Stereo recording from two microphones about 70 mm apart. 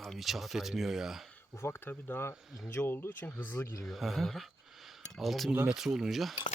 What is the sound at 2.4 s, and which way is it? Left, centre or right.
Speech, centre.